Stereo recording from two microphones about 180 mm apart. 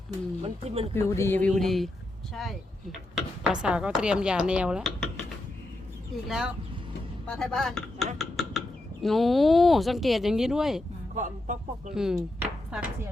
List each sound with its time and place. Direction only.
0.4 s speech: 35° right (ahead or behind)
0.9 s speech: 15° left (ahead or behind); by 5.2 s centre (ahead or behind)
6.2 s speech: 5° right (ahead or behind)
11.1 s speech: 45° right (ahead or behind)
11.9 s speech: 5° right (ahead or behind)